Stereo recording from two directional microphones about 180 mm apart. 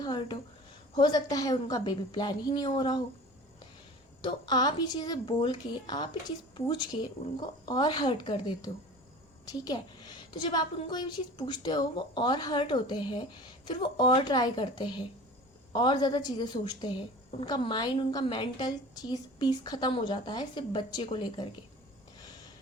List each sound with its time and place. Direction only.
0.0 s a woman's voice: 20° left (ahead or behind)
4.2 s a woman's voice: 25° left (ahead or behind)